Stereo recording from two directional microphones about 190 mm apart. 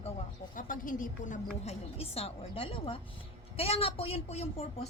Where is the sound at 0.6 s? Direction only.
45° left (ahead or behind).